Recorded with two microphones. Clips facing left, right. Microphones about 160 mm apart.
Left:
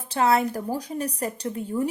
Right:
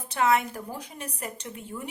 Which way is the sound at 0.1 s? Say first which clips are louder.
Left 3 dB; 35° left (ahead or behind).